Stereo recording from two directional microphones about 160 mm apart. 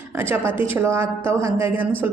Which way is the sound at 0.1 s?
15° right (ahead or behind).